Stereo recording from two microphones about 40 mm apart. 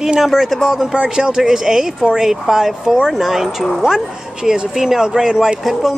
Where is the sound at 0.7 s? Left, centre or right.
Centre.